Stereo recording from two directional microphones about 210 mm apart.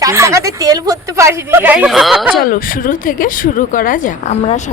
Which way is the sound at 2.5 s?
40° left (ahead or behind).